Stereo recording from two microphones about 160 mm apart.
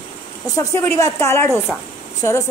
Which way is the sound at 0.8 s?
20° left (ahead or behind).